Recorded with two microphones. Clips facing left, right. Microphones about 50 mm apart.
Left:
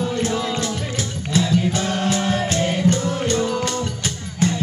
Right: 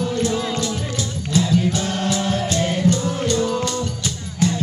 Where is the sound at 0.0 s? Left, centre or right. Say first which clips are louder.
Right 1 dB; left.